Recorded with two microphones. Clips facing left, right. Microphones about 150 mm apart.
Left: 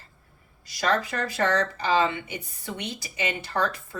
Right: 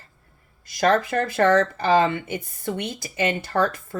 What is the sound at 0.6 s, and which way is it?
Speech, 50° right (ahead or behind).